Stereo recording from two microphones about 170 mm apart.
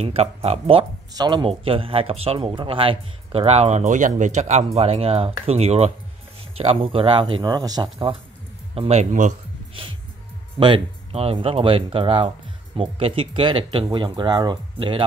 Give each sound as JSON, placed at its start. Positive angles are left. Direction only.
{"t": 0.0, "sound": "speech", "side_deg": -35}
{"t": 8.7, "sound": "speech", "side_deg": -40}
{"t": 10.6, "sound": "speech", "side_deg": -30}